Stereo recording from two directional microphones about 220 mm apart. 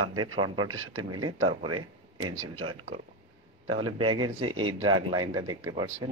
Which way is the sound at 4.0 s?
20° right (ahead or behind).